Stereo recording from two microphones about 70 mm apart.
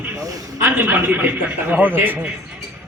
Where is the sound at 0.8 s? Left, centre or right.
Right.